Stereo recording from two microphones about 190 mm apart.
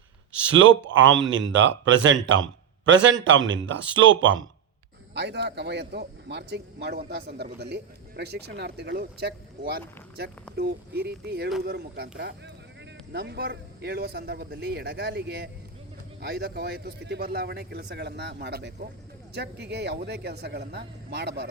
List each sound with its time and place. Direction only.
0.5 s speech: 85° right
5.1 s speech: 65° right (ahead or behind)